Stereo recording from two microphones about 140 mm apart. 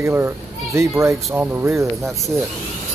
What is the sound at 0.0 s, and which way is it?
Speech, 15° right (ahead or behind).